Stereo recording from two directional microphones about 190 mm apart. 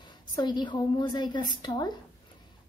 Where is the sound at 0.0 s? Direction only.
25° left (ahead or behind).